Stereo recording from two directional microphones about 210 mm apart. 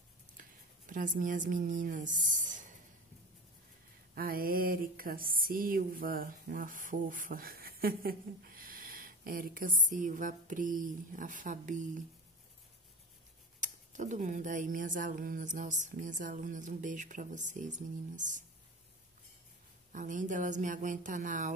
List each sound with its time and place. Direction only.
0.4 s speech: 40° right (ahead or behind)
4.1 s a sound: 45° right (ahead or behind)
13.6 s speech: 35° right (ahead or behind)
19.9 s speech: 40° right (ahead or behind)